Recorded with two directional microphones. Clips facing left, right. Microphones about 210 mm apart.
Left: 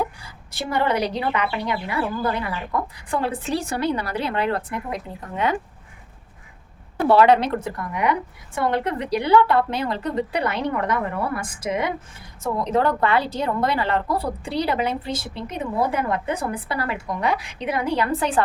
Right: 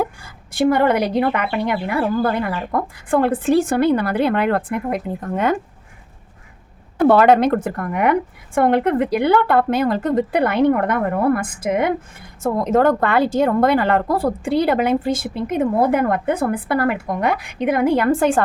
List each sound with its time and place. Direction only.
0.0 s speech: 50° right (ahead or behind)
7.1 s speech: 50° right (ahead or behind)